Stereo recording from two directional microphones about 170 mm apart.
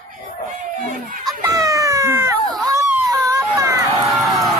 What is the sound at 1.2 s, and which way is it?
Baby cry, 20° right (ahead or behind).